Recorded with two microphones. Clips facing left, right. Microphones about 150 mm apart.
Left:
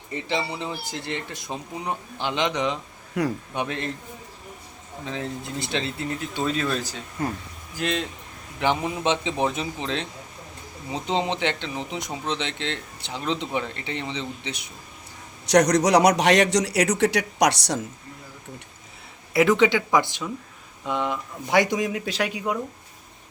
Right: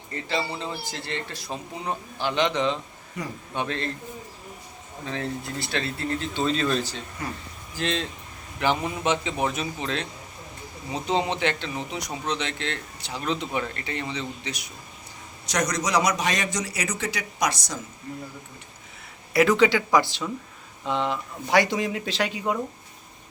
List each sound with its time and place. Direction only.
0.1 s a man's voice: 20° left (ahead or behind)
3.2 s a man's voice: 90° left
3.5 s a man's voice: 15° left (ahead or behind)
5.0 s a man's voice: 15° left (ahead or behind)
15.4 s speech: 65° left (ahead or behind)
19.3 s speech: 20° left (ahead or behind)
20.8 s speech: 20° right (ahead or behind)
21.5 s a man's voice: 20° left (ahead or behind)
21.8 s a man's voice: 10° left (ahead or behind)